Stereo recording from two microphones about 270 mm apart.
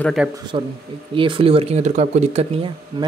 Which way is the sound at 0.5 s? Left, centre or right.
Right.